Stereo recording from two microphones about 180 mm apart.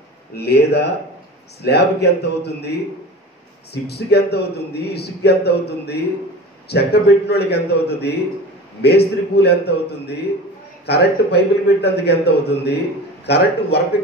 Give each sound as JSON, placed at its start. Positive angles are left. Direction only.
{"t": 0.4, "sound": "a man's voice", "side_deg": 65}